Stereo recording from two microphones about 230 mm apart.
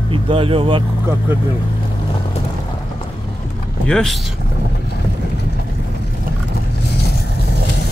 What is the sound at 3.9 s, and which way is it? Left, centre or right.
Speech, centre.